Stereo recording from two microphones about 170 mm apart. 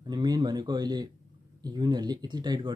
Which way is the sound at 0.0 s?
25° right (ahead or behind).